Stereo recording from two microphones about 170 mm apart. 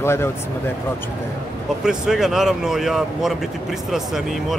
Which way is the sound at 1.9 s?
Centre (ahead or behind).